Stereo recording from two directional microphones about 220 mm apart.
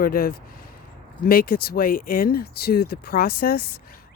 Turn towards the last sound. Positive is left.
turn(degrees=45)  # may be behind; listen again after turning